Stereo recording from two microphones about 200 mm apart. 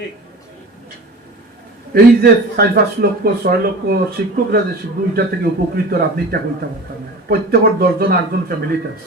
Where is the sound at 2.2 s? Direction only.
50° right (ahead or behind).